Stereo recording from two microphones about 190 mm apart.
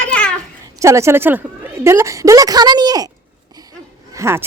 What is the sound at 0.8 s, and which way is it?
A woman's voice, 15° right (ahead or behind).